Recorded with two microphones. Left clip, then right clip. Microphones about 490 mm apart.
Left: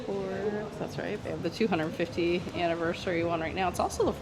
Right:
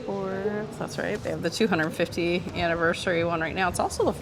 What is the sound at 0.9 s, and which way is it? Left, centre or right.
Speech, centre.